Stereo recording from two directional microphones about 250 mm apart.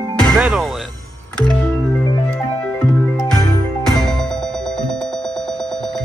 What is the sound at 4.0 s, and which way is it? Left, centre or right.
Music, centre.